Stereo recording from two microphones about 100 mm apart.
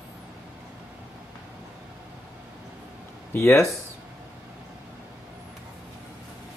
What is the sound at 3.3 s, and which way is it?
Speech, 30° left (ahead or behind).